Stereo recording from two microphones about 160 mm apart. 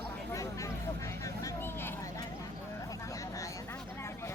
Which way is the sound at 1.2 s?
20° left (ahead or behind).